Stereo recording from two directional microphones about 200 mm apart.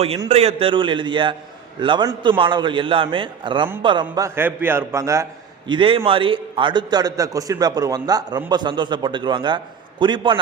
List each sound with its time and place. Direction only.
0.3 s a man's voice: 30° right (ahead or behind)